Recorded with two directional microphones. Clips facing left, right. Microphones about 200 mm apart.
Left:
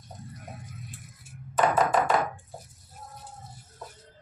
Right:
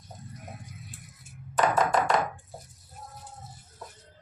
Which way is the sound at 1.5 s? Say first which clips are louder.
Left 1 dB; 5° left (ahead or behind).